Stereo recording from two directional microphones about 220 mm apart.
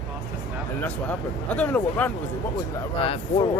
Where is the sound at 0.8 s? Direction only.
5° left (ahead or behind).